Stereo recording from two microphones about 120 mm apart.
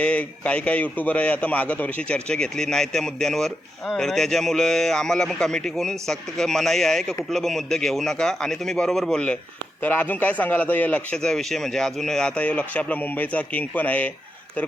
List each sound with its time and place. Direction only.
0.0 s a man's voice: 10° left (ahead or behind)